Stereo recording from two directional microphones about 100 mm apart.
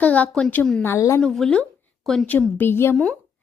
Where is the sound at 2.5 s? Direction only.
20° left (ahead or behind).